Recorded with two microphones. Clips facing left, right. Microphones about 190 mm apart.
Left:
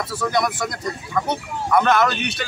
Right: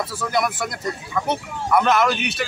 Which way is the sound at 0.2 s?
5° right (ahead or behind).